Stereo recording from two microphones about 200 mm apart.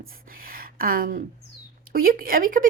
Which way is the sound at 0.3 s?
45° right (ahead or behind).